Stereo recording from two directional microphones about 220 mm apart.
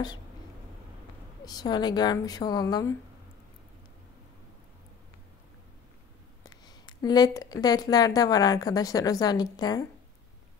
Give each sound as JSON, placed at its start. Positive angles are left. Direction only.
{"t": 1.4, "sound": "speech", "side_deg": 20}
{"t": 6.5, "sound": "speech", "side_deg": 20}